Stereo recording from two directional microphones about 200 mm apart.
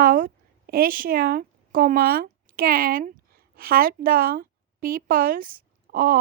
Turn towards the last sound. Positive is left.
turn(degrees=-45)  # may be behind; listen again after turning